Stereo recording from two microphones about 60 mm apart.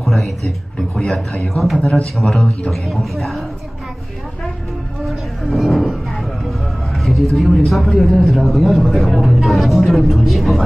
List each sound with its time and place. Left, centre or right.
0.0 s a man's voice: centre
1.1 s speech: centre
1.5 s a man's voice: centre
5.0 s a sound: centre
7.0 s a sound: centre
7.3 s a man's voice: centre